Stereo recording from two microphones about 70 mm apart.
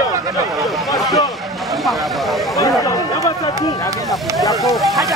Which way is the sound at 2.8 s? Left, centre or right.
Left.